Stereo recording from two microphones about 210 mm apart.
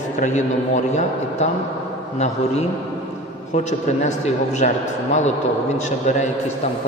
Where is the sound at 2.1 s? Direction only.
30° left (ahead or behind).